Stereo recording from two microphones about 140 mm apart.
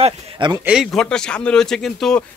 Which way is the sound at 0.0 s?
35° right (ahead or behind).